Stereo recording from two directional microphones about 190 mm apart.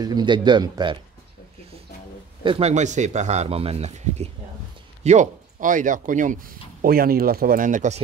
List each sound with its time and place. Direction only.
0.0 s speech: 25° right (ahead or behind)
2.4 s speech: 30° right (ahead or behind)